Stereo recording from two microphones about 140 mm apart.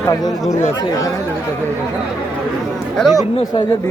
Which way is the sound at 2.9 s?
5° left (ahead or behind).